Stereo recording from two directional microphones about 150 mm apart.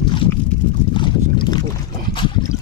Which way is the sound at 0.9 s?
30° left (ahead or behind).